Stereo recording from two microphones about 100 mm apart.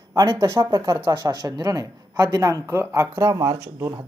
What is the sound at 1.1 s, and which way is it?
Speech, 45° right (ahead or behind).